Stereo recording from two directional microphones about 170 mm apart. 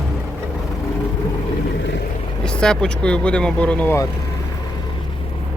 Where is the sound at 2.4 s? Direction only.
5° left (ahead or behind).